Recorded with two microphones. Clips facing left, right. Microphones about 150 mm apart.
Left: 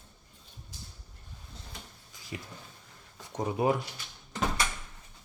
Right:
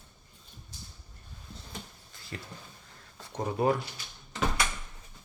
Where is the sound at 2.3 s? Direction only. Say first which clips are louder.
Left 1 dB; 10° left (ahead or behind).